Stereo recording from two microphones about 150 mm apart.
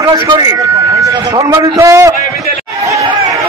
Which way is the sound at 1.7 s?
20° right (ahead or behind).